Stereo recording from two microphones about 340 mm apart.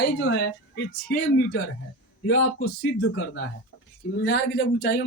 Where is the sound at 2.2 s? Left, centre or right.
Left.